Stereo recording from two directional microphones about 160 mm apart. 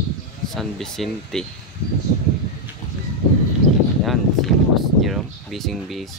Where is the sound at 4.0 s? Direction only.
Centre (ahead or behind).